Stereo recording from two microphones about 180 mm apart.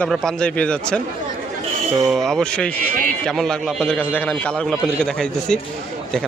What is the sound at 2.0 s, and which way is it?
A man's voice, centre (ahead or behind).